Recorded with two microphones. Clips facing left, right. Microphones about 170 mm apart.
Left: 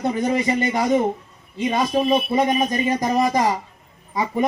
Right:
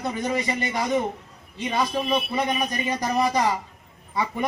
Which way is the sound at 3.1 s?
45° left (ahead or behind).